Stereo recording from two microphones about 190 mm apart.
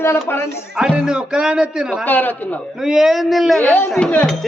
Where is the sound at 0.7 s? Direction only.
5° right (ahead or behind).